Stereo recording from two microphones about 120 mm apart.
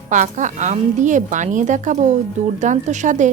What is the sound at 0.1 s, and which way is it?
Speech, 90° right.